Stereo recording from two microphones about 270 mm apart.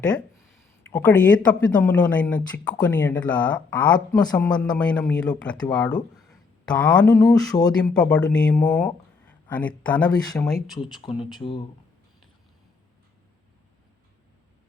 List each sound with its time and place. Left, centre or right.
0.0 s speech: centre
11.0 s speech: centre